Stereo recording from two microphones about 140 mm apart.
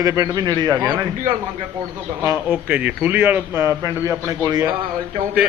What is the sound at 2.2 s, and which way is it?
A man's voice, 15° right (ahead or behind).